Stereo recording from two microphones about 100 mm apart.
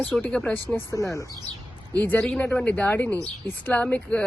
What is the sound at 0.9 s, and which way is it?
Speech, 30° left (ahead or behind).